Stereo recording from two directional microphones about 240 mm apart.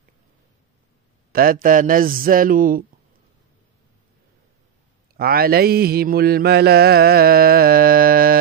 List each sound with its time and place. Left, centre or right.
1.3 s speech: right
5.1 s mantra: right